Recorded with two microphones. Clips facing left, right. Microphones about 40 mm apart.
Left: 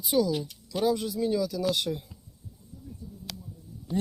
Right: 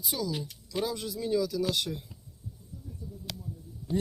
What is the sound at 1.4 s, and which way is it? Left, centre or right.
Speech, left.